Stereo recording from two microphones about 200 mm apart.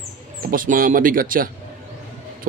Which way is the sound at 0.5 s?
45° right (ahead or behind).